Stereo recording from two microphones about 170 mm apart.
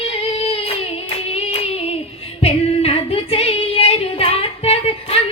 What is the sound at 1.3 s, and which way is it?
Singing, 35° left (ahead or behind).